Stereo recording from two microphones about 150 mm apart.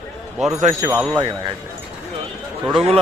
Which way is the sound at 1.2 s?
30° right (ahead or behind).